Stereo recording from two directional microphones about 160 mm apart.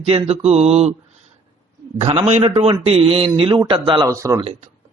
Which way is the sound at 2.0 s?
40° right (ahead or behind).